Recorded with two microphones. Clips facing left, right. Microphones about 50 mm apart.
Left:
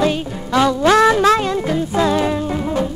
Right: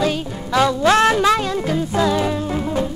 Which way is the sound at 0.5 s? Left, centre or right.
Left.